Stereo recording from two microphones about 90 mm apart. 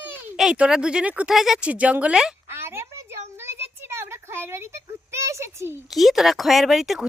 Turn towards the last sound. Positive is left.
turn(degrees=-5)  # may be behind; listen again after turning